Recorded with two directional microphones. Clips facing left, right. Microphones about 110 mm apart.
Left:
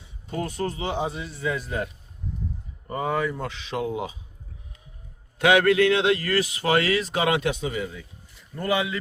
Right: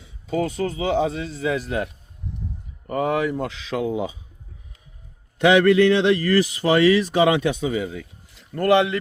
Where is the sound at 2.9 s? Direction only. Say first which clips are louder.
Right 4 dB; 75° right (ahead or behind).